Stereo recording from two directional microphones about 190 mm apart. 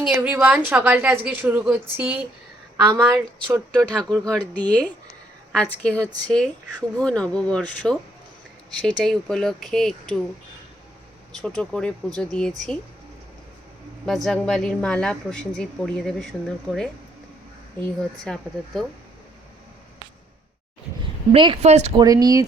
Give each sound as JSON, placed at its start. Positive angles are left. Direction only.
{"t": 0.0, "sound": "a woman's voice", "side_deg": -5}
{"t": 3.3, "sound": "speech", "side_deg": 5}
{"t": 11.3, "sound": "speech", "side_deg": 5}
{"t": 14.0, "sound": "speech", "side_deg": 0}
{"t": 18.3, "sound": "speech", "side_deg": 0}
{"t": 21.3, "sound": "a woman's voice", "side_deg": -25}
{"t": 22.0, "sound": "speech", "side_deg": -20}